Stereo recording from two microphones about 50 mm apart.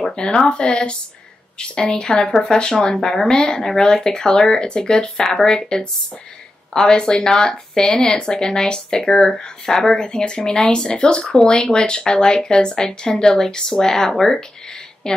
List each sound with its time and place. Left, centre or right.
0.0 s speech: centre